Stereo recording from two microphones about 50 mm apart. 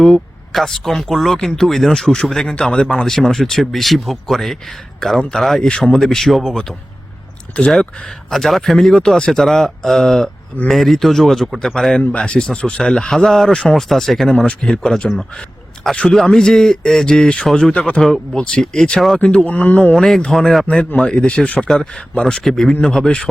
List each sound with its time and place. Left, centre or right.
0.0 s a man's voice: centre
7.6 s speech: left
8.3 s a man's voice: centre
11.9 s speech: left
12.8 s speech: centre
14.3 s speech: centre
17.7 s speech: left; by 19.2 s centre
19.5 s speech: left
19.9 s speech: centre; by 21.7 s left
22.2 s speech: centre